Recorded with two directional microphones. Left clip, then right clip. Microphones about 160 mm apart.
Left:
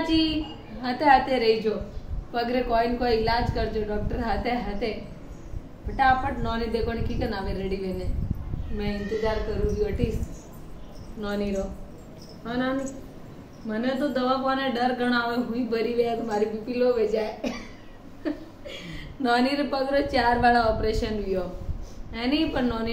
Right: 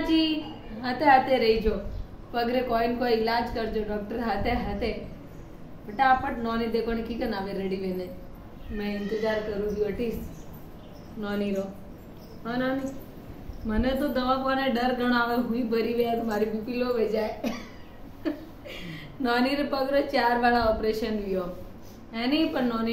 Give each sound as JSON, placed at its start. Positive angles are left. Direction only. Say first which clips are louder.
{"t": 0.0, "sound": "a sound", "louder": "left 1 dB", "side_deg": 10}
{"t": 0.7, "sound": "a woman's voice", "louder": "left 1 dB", "side_deg": 10}
{"t": 5.9, "sound": "a woman's voice", "louder": "left 1 dB", "side_deg": 10}
{"t": 11.1, "sound": "a woman's voice", "louder": "left 1 dB", "side_deg": 10}